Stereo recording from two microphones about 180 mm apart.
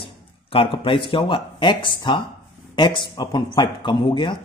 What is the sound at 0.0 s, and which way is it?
Speech, 30° left (ahead or behind).